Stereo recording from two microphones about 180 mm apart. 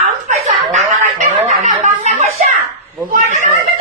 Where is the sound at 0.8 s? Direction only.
40° right (ahead or behind).